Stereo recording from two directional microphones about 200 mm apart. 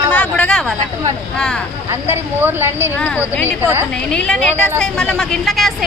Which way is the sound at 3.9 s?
5° left (ahead or behind).